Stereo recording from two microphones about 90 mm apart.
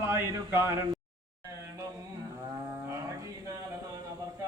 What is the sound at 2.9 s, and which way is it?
Male singing, 35° right (ahead or behind).